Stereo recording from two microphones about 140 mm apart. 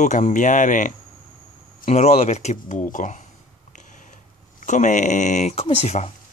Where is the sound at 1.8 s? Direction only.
60° left (ahead or behind).